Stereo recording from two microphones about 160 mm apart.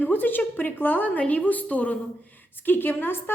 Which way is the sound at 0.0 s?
10° left (ahead or behind).